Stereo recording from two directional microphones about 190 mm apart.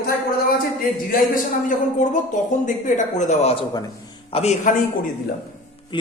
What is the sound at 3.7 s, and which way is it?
Speech, 20° left (ahead or behind).